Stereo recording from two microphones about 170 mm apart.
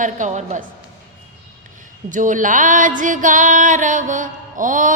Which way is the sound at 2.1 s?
50° right (ahead or behind).